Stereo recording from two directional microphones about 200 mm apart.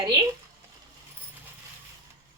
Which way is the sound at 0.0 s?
20° right (ahead or behind).